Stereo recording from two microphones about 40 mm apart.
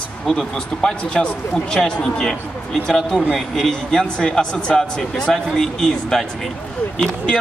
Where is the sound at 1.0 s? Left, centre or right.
Left.